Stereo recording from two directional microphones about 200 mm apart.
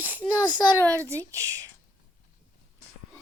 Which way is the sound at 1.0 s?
15° right (ahead or behind).